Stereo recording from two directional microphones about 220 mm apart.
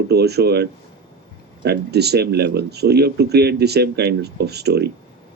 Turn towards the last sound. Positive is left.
turn(degrees=-50)  # may be behind; listen again after turning